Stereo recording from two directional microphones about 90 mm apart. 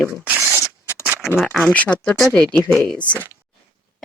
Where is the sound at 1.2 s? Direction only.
5° right (ahead or behind).